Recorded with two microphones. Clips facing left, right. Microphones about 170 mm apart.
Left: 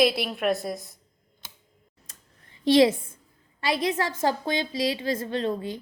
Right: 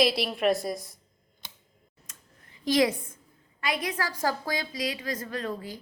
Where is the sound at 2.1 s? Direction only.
30° left (ahead or behind).